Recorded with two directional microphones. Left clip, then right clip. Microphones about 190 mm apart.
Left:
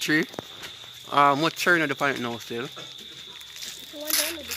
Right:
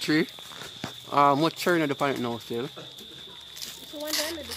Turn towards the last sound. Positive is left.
turn(degrees=-15)  # may be behind; listen again after turning